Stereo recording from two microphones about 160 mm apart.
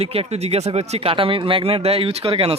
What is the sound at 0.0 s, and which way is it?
Speech, 40° right (ahead or behind).